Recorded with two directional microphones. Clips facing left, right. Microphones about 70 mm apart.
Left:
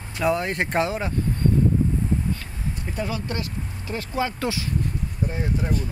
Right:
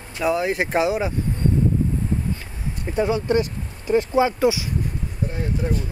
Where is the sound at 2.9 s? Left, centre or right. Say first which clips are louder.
Right 10 dB; right.